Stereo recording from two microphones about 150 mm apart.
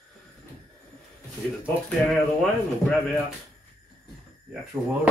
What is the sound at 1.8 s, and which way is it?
Speech, 5° left (ahead or behind).